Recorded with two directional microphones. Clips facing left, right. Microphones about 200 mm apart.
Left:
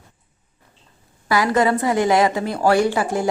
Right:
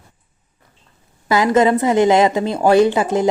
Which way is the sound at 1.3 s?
20° right (ahead or behind).